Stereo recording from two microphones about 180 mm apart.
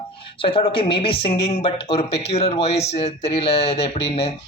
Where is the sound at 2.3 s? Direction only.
35° left (ahead or behind).